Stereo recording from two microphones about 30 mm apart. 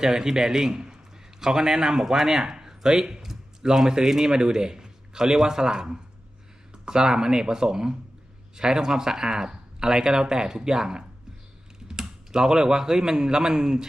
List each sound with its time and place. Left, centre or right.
0.0 s speech: centre